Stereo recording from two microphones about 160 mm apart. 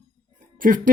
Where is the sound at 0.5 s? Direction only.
60° right (ahead or behind).